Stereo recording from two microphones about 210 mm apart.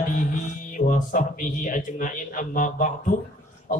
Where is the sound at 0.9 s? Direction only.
40° left (ahead or behind).